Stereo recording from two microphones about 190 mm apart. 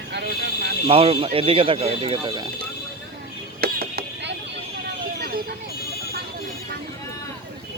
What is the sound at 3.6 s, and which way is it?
Mechanisms, 55° right (ahead or behind).